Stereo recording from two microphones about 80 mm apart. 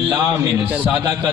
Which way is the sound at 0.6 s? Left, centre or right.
Centre.